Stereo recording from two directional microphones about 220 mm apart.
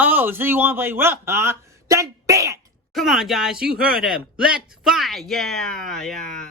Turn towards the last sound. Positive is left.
turn(degrees=0)  # may be behind; listen again after turning